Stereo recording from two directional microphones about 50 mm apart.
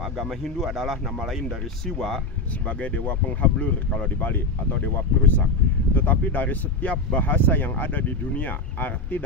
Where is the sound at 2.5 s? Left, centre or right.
Left.